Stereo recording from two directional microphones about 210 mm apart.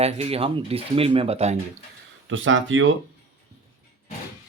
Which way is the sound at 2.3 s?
65° right (ahead or behind).